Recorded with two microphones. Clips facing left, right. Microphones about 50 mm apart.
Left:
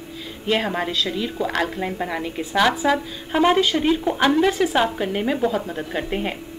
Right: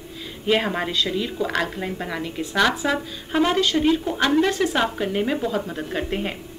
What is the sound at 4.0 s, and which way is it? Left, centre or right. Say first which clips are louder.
Speech: left 3 dB; left.